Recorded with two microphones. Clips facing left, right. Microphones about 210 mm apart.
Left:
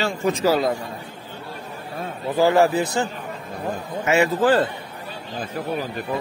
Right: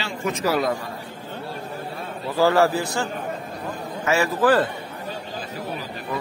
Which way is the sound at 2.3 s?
20° left (ahead or behind).